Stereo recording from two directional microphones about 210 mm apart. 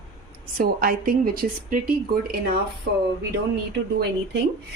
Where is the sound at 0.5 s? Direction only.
45° right (ahead or behind).